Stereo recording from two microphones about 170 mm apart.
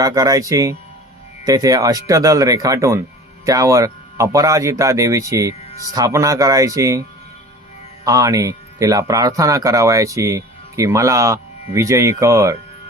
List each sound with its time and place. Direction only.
0.0 s speech: 20° right (ahead or behind)
8.0 s speech: 20° right (ahead or behind)